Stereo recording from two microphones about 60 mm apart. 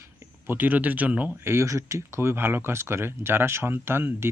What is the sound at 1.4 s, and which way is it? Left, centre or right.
Speech, right.